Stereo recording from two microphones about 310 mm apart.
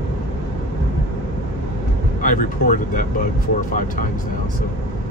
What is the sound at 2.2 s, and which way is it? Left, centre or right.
Vehicle, left.